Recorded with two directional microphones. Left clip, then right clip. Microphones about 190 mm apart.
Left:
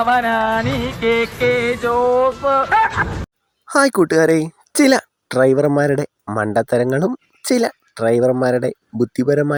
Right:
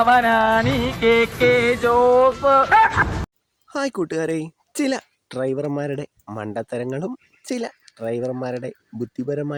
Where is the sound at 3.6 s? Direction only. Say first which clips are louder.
Left 10 dB; 35° left (ahead or behind).